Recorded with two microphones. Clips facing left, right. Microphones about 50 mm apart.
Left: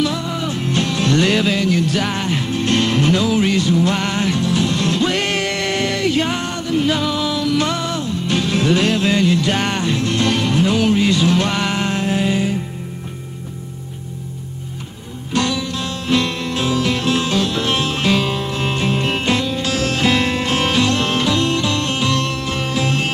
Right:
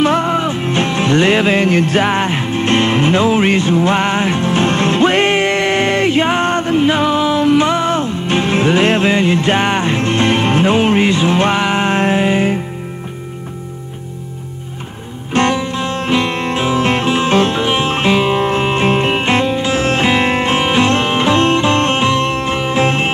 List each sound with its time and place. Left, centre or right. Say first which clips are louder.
0.0 s music: right 7 dB; right
0.5 s music: right 4 dB; right
15.3 s music: right 5 dB; right
17.6 s music: right 4 dB; right